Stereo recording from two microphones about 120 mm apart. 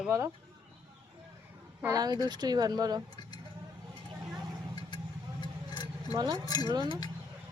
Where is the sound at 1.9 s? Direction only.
35° right (ahead or behind).